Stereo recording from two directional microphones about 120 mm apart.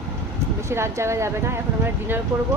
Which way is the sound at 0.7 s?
20° right (ahead or behind).